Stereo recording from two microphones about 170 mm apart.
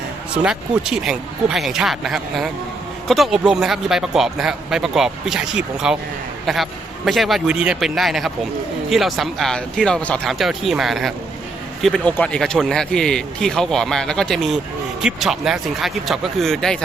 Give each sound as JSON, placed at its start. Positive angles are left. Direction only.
{"t": 0.4, "sound": "a man's voice", "side_deg": -5}